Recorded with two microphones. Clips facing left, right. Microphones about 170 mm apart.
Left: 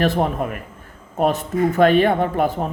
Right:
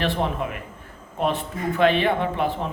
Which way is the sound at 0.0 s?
45° left (ahead or behind).